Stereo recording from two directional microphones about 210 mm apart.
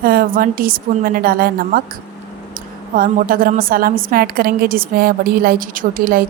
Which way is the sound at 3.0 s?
40° right (ahead or behind).